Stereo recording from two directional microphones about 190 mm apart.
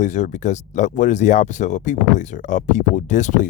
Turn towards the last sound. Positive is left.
turn(degrees=40)  # may be behind; listen again after turning